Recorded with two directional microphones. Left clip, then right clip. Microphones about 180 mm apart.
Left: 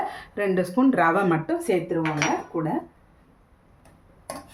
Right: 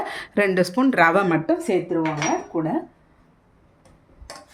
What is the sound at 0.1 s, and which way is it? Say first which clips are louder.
A woman's voice: right 5 dB; 55° right (ahead or behind).